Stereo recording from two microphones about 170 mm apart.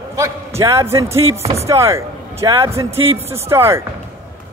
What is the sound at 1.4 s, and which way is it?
Speech, 35° right (ahead or behind).